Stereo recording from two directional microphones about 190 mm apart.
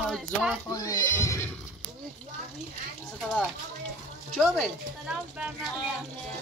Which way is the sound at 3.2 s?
5° left (ahead or behind).